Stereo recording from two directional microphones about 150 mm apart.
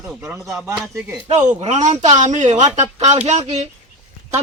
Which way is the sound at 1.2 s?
45° right (ahead or behind).